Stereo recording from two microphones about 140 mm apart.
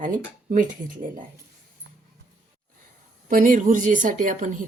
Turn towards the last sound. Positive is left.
turn(degrees=-65)  # may be behind; listen again after turning